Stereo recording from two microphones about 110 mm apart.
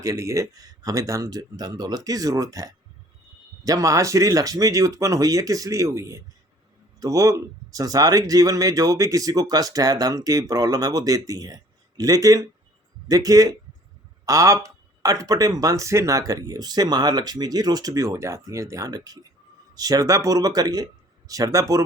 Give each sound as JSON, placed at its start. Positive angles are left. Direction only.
{"t": 0.0, "sound": "speech", "side_deg": -30}